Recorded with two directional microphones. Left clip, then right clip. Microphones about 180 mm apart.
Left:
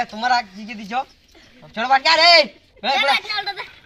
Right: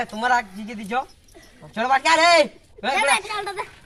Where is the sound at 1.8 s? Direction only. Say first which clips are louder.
Left 2 dB; 50° right (ahead or behind).